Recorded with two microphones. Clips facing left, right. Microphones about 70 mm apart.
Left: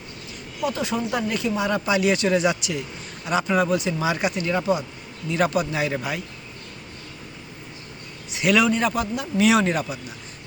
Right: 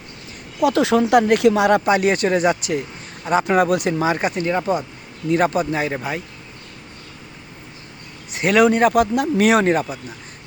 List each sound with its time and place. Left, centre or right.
0.6 s a woman's voice: right
1.2 s speech: right
3.4 s speech: right
3.9 s speech: right
8.3 s speech: right